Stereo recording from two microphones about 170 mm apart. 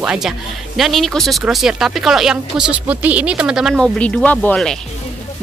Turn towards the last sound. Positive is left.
turn(degrees=5)  # may be behind; listen again after turning